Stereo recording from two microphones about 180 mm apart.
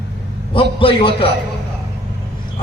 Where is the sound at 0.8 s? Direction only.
30° left (ahead or behind).